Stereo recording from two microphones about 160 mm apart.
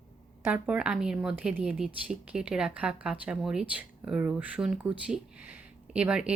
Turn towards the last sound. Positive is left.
turn(degrees=-5)  # may be behind; listen again after turning